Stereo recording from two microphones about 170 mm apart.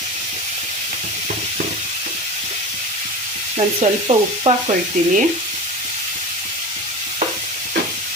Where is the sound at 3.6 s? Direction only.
40° right (ahead or behind).